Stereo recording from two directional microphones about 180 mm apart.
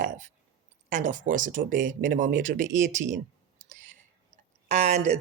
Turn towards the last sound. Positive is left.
turn(degrees=-35)  # may be behind; listen again after turning